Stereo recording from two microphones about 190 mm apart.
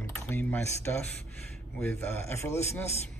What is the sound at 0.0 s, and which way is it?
Speech, 10° left (ahead or behind).